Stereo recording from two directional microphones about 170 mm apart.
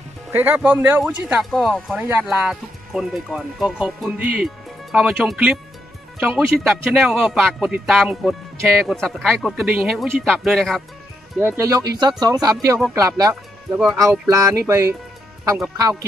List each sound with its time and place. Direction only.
0.3 s speech: 10° right (ahead or behind)
11.3 s speech: 15° right (ahead or behind)